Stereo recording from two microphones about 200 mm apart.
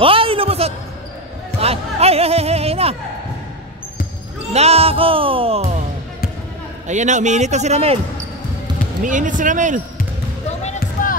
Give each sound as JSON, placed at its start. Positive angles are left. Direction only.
{"t": 0.0, "sound": "a sound", "side_deg": -25}
{"t": 1.6, "sound": "speech", "side_deg": -30}
{"t": 4.5, "sound": "speech", "side_deg": -30}
{"t": 6.9, "sound": "a man's voice", "side_deg": -35}
{"t": 9.0, "sound": "a man's voice", "side_deg": -40}
{"t": 10.6, "sound": "basketball bounce", "side_deg": 40}